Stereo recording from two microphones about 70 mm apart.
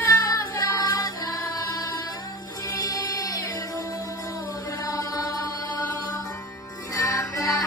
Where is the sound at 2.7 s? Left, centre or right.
Left.